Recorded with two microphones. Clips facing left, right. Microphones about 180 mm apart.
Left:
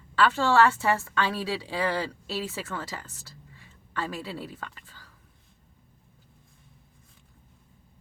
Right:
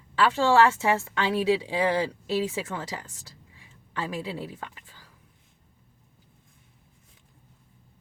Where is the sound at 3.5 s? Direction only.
15° right (ahead or behind).